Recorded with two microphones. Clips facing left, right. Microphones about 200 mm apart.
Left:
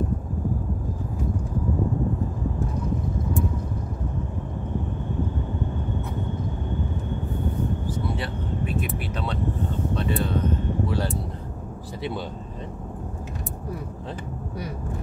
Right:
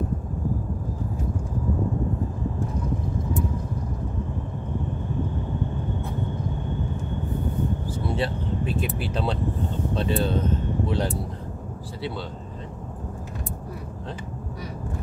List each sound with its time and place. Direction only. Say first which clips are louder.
8.2 s vehicle: right 3 dB; 30° right (ahead or behind)
9.9 s speech: right 3 dB; 30° right (ahead or behind)